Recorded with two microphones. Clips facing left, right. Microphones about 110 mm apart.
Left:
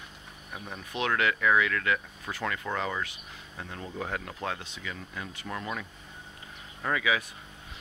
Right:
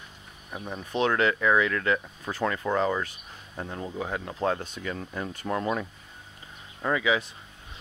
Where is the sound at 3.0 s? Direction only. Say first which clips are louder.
Right 2 dB; 35° right (ahead or behind).